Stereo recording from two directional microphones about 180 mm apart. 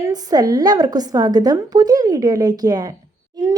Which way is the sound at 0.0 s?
20° right (ahead or behind).